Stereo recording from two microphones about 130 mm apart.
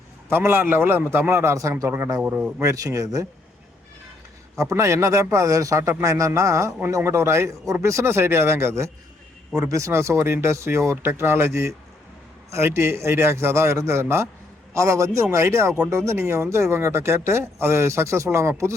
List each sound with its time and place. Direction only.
0.3 s a man's voice: 15° right (ahead or behind)
2.2 s a man's voice: 10° right (ahead or behind)
2.6 s speech: 25° right (ahead or behind)
4.5 s speech: 20° right (ahead or behind)